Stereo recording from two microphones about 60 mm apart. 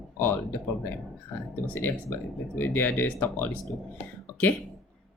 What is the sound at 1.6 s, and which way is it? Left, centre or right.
Speech, left.